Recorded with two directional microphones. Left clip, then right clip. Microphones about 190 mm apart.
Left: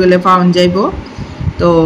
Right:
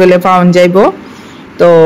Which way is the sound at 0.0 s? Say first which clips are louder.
Right 3 dB; 35° right (ahead or behind).